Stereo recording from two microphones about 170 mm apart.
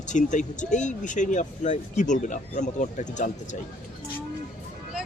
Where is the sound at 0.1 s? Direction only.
45° left (ahead or behind).